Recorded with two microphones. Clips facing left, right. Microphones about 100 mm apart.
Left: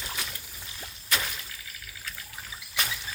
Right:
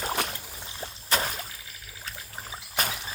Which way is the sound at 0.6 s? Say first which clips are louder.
Right 4 dB; 35° right (ahead or behind).